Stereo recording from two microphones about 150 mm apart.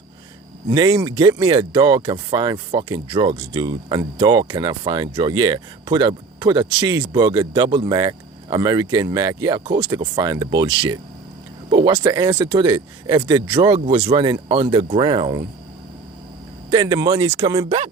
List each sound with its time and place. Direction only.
0.7 s speech: 30° right (ahead or behind)
16.6 s speech: 25° right (ahead or behind)